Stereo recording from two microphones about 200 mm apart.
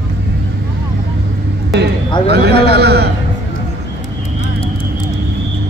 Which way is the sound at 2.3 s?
55° right (ahead or behind).